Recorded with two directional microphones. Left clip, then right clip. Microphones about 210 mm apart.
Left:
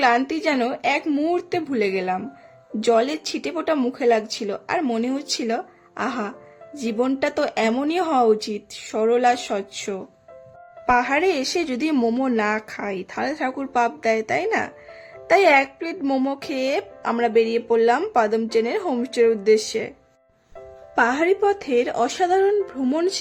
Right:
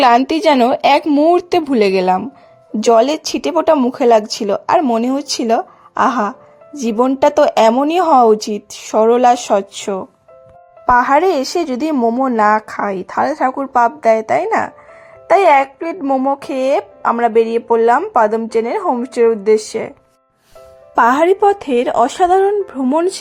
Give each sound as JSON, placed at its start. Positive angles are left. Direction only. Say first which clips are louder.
{"t": 0.2, "sound": "a woman's voice", "louder": "right 10 dB", "side_deg": -35}
{"t": 1.0, "sound": "a woman's voice", "louder": "right 11 dB", "side_deg": -25}
{"t": 12.9, "sound": "a woman's voice", "louder": "right 9 dB", "side_deg": -15}
{"t": 13.3, "sound": "speech", "louder": "right 6 dB", "side_deg": 0}
{"t": 13.8, "sound": "a woman's voice", "louder": "right 10 dB", "side_deg": -15}
{"t": 15.3, "sound": "a woman's voice", "louder": "right 6 dB", "side_deg": -10}
{"t": 16.4, "sound": "a woman's voice", "louder": "right 8 dB", "side_deg": -15}
{"t": 20.9, "sound": "speech", "louder": "right 8 dB", "side_deg": -25}